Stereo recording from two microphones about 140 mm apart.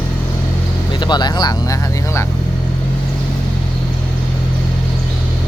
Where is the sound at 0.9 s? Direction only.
30° left (ahead or behind).